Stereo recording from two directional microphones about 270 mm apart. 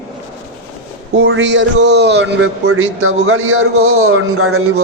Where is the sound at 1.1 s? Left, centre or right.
Right.